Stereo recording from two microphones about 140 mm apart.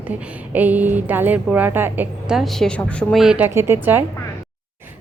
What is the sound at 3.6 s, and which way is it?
Speech, 15° right (ahead or behind).